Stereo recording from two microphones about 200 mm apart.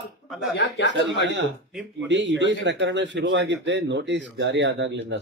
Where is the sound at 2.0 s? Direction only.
65° right (ahead or behind).